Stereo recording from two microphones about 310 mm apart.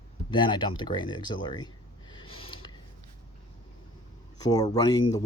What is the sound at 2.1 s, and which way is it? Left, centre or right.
Snort, centre.